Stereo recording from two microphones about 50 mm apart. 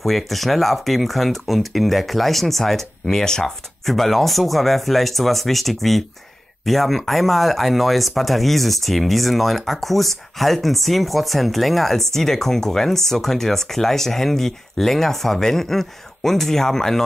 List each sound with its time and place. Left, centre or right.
0.0 s speech: centre